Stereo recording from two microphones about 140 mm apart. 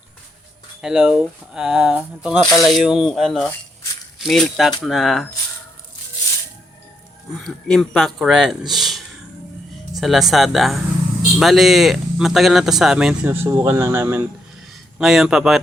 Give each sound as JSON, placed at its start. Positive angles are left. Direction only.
{"t": 0.8, "sound": "speech", "side_deg": -5}
{"t": 2.4, "sound": "speech", "side_deg": 25}
{"t": 2.6, "sound": "speech", "side_deg": 0}
{"t": 7.4, "sound": "speech", "side_deg": 0}
{"t": 13.2, "sound": "speech", "side_deg": -15}
{"t": 14.9, "sound": "speech", "side_deg": -5}